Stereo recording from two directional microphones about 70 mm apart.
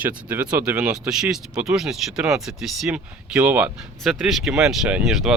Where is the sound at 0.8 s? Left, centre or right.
Centre.